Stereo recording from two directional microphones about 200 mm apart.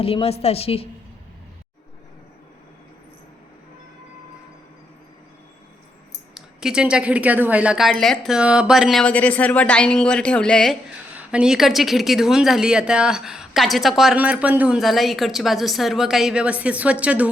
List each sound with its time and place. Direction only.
0.0 s a woman's voice: 30° left (ahead or behind)
6.3 s a woman's voice: 5° right (ahead or behind)
11.1 s a woman's voice: 5° right (ahead or behind)